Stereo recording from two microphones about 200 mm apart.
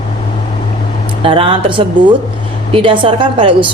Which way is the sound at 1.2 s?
25° right (ahead or behind).